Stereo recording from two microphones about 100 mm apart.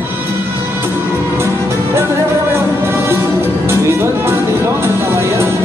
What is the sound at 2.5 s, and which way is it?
Music, 25° right (ahead or behind).